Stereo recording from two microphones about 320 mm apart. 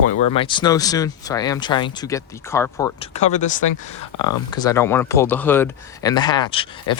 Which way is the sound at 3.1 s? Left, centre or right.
Left.